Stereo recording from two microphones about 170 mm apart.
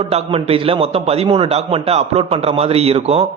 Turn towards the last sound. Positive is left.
turn(degrees=-35)  # may be behind; listen again after turning